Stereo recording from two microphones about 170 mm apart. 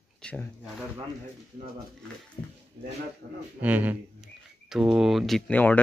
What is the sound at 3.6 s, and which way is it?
Speech, 10° right (ahead or behind).